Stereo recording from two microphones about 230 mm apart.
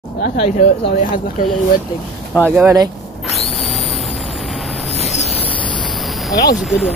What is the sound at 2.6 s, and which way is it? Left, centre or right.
Speech, centre.